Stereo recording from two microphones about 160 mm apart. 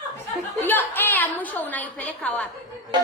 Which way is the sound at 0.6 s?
10° left (ahead or behind).